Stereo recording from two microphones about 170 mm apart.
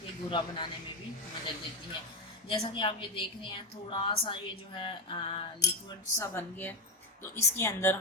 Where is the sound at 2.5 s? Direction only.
30° left (ahead or behind).